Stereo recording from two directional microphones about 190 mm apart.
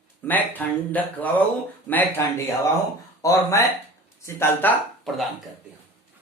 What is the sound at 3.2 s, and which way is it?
Speech, 15° left (ahead or behind).